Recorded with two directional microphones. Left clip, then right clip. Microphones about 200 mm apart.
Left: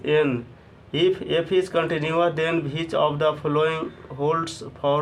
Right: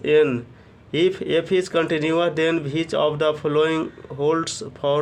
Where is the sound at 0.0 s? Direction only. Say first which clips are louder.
Right 4 dB; 35° right (ahead or behind).